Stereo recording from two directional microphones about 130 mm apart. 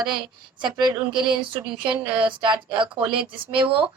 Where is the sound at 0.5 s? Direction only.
35° right (ahead or behind).